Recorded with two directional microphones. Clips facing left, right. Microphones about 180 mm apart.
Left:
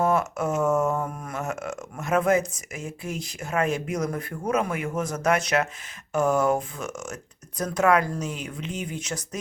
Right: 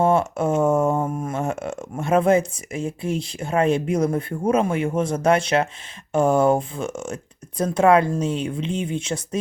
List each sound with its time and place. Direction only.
0.0 s speech: 30° right (ahead or behind)